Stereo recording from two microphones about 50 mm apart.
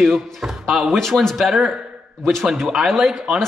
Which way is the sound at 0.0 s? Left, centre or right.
Centre.